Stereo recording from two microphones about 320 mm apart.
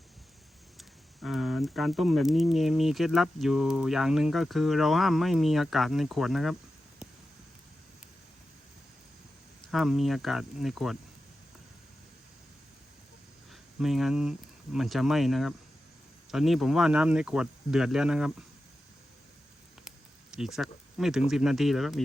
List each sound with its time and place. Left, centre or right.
0.8 s speech: centre
9.7 s speech: centre
13.5 s speech: centre
20.6 s speech: centre